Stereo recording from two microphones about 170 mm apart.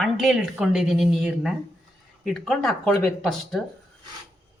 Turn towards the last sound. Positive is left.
turn(degrees=0)  # may be behind; listen again after turning